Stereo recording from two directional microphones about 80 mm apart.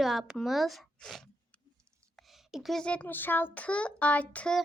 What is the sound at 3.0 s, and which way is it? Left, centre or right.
A child's voice, left.